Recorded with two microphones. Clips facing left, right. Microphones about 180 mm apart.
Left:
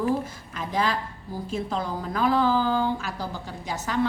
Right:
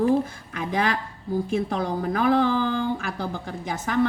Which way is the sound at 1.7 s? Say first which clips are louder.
Right 4 dB; 55° right (ahead or behind).